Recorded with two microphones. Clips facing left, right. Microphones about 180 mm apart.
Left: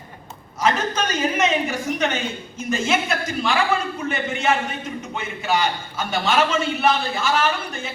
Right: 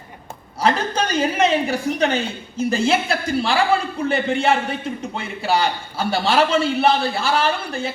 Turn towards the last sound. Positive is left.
turn(degrees=-35)  # may be behind; listen again after turning